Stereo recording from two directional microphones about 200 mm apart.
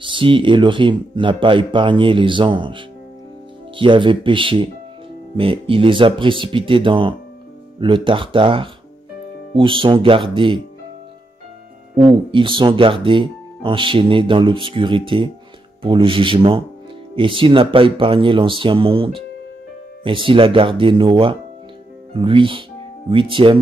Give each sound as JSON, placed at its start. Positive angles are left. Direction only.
{"t": 0.0, "sound": "speech", "side_deg": -25}
{"t": 12.0, "sound": "speech", "side_deg": -25}